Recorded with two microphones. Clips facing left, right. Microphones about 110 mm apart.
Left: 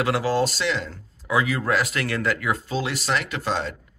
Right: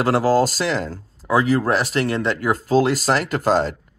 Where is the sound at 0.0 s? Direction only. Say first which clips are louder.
Right 5 dB; 40° right (ahead or behind).